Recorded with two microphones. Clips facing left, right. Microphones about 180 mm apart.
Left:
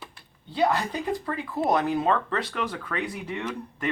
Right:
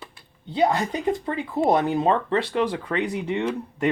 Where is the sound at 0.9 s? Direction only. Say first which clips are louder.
Right 4 dB; 25° right (ahead or behind).